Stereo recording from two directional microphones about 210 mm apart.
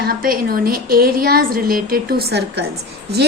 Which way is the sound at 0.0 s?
45° right (ahead or behind).